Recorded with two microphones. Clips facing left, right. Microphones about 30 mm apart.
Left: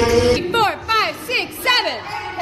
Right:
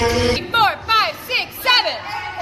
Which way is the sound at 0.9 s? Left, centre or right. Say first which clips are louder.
Right 1 dB; centre.